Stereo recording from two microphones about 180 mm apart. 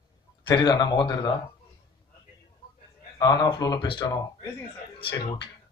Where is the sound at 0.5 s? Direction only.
25° left (ahead or behind).